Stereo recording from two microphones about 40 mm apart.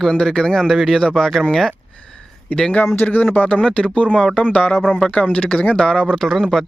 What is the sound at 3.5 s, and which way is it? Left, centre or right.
Speech, left.